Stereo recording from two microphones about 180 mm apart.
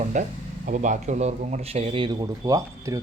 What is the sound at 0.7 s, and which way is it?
Speech, 45° right (ahead or behind).